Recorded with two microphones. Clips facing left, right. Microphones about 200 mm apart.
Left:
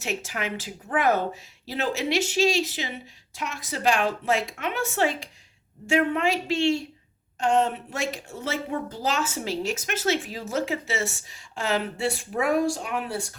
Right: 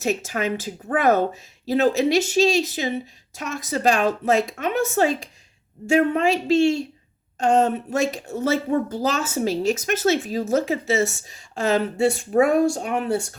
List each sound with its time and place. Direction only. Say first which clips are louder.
0.0 s a woman's voice: right 7 dB; 40° right (ahead or behind)